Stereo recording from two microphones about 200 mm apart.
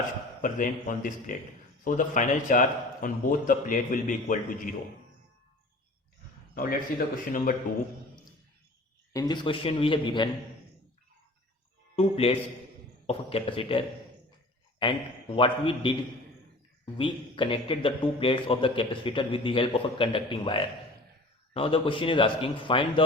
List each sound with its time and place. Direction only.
0.4 s a man's voice: 40° left (ahead or behind)
6.5 s a man's voice: 45° left (ahead or behind)
9.1 s a man's voice: 20° left (ahead or behind)
11.9 s a man's voice: 30° left (ahead or behind)